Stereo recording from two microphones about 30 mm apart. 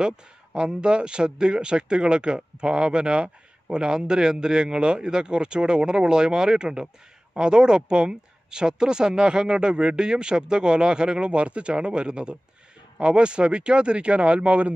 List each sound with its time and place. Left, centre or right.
0.0 s a man's voice: right